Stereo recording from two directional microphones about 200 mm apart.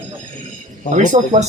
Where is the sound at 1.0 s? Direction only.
35° right (ahead or behind).